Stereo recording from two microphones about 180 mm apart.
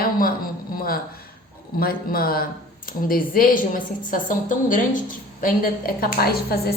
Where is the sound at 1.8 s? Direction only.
55° left (ahead or behind).